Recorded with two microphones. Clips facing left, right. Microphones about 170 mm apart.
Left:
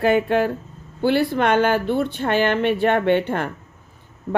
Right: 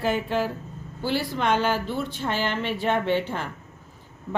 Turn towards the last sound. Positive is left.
turn(degrees=60)  # may be behind; listen again after turning